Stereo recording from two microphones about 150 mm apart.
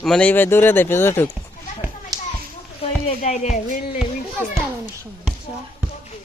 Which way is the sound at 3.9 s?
5° right (ahead or behind).